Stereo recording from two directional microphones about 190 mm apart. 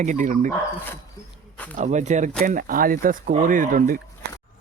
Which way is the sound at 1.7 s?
40° right (ahead or behind).